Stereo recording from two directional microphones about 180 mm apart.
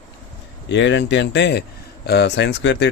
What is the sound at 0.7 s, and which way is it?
Speech, 80° left.